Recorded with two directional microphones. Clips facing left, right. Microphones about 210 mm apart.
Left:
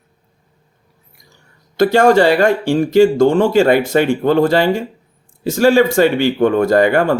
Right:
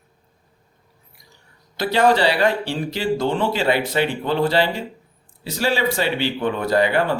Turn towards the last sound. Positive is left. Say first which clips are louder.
# left 6 dB
turn(degrees=50)  # may be behind; listen again after turning